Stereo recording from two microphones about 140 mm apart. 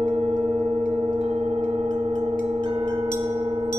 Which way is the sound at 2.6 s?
35° right (ahead or behind).